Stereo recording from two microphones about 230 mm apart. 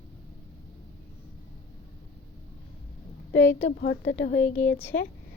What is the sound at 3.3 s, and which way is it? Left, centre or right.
Speech, left.